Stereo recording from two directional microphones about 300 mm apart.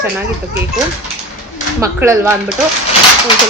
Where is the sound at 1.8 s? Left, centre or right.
Centre.